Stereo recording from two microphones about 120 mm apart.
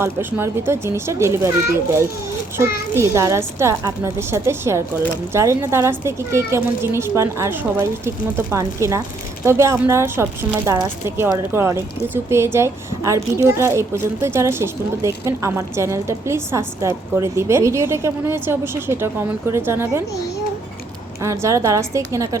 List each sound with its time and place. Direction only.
0.0 s speech: 15° right (ahead or behind)
2.6 s speech: 20° right (ahead or behind)
21.2 s speech: 25° right (ahead or behind)